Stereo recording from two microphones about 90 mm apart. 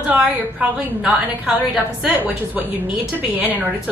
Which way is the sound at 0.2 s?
15° right (ahead or behind).